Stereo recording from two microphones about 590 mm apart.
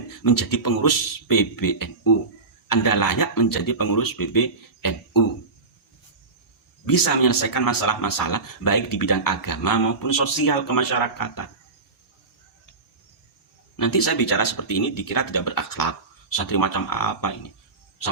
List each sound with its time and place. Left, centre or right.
0.2 s speech: left
6.8 s speech: left
13.7 s speech: left